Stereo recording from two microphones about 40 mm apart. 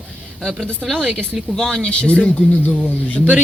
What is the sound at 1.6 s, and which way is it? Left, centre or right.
Speech, centre.